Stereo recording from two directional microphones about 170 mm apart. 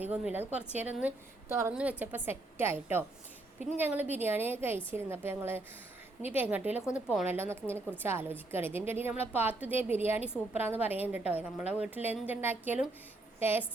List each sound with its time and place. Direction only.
0.0 s a woman's voice: 10° right (ahead or behind)
7.3 s a woman's voice: 15° right (ahead or behind)